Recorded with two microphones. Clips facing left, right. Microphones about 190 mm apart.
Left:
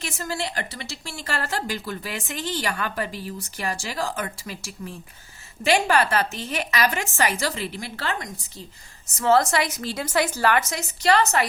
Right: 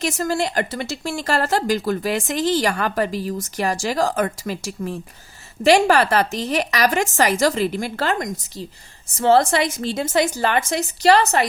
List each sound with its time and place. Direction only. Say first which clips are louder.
0.2 s a woman's voice: right 6 dB; 45° right (ahead or behind)
1.2 s a woman's voice: right 7 dB; 40° right (ahead or behind)
9.1 s a woman's voice: right 4 dB; 30° right (ahead or behind)